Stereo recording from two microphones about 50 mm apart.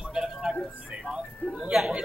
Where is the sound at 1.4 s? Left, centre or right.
Left.